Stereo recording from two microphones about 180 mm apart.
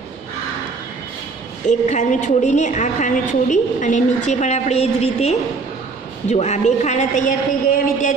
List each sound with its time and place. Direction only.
1.7 s a woman's voice: 40° left (ahead or behind)